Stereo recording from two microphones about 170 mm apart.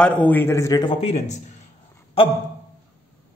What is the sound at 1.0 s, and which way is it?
Speech, 40° left (ahead or behind).